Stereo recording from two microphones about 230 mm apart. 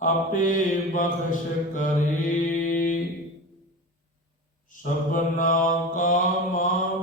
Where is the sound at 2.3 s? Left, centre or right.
Left.